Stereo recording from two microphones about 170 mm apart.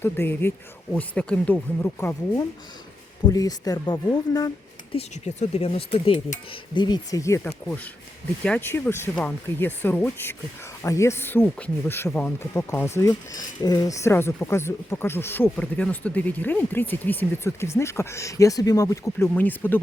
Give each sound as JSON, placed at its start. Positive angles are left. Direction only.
{"t": 0.0, "sound": "speech", "side_deg": 15}
{"t": 4.9, "sound": "speech", "side_deg": 40}